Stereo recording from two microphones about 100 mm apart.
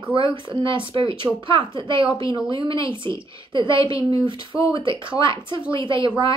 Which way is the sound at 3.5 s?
55° right (ahead or behind).